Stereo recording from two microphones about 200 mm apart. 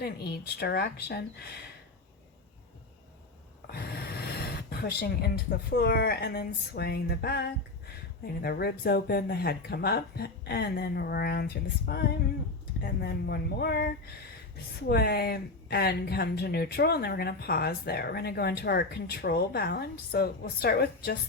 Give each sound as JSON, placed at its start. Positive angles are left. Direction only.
{"t": 0.0, "sound": "speech", "side_deg": 50}
{"t": 3.7, "sound": "speech", "side_deg": 50}